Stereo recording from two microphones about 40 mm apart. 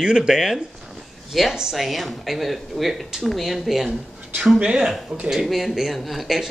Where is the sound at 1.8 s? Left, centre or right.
Centre.